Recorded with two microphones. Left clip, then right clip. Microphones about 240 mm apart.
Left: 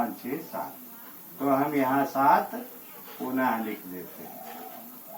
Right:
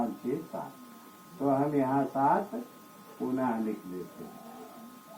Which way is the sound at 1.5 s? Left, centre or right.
Centre.